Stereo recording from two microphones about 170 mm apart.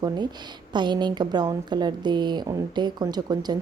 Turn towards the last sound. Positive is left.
turn(degrees=-25)  # may be behind; listen again after turning